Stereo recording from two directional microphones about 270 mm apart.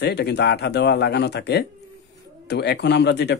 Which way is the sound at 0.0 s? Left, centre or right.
Left.